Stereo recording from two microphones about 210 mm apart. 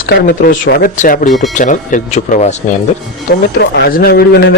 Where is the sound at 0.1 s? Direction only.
45° left (ahead or behind).